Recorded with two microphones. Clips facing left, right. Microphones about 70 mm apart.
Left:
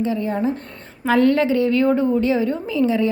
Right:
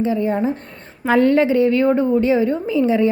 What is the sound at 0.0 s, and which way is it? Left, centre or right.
A woman's voice, right.